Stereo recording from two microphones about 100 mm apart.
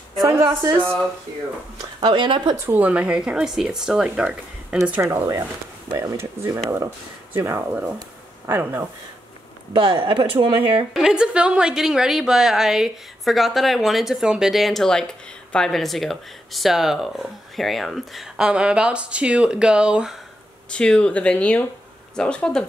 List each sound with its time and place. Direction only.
0.2 s a woman's voice: 35° right (ahead or behind)
1.8 s speech: 50° right (ahead or behind)
2.5 s speech: 25° right (ahead or behind)
2.8 s speech: 10° right (ahead or behind)
5.0 s speech: 30° right (ahead or behind)
9.7 s speech: 55° right (ahead or behind)
10.9 s a woman's voice: 5° right (ahead or behind)
20.7 s speech: 10° left (ahead or behind)